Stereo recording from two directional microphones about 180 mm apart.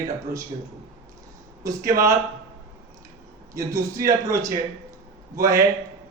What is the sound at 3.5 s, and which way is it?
A man's voice, 15° right (ahead or behind).